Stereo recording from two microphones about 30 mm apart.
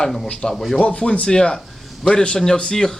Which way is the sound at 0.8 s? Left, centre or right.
Left.